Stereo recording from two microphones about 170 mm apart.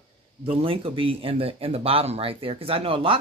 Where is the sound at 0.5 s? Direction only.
35° right (ahead or behind).